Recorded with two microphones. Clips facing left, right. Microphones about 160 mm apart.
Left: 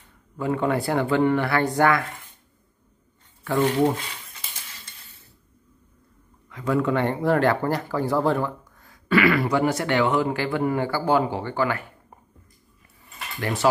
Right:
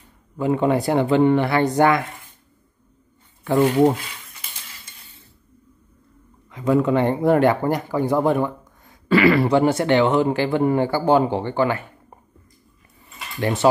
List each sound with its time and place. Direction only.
0.4 s speech: 20° right (ahead or behind)
6.5 s speech: 20° right (ahead or behind)
13.4 s speech: 25° right (ahead or behind)